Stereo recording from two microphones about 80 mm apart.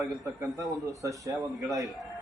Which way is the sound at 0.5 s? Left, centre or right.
Right.